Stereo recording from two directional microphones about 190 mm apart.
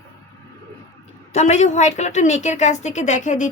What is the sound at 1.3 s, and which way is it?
Speech, 35° left (ahead or behind).